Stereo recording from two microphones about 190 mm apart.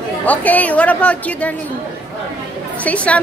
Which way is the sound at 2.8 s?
5° left (ahead or behind).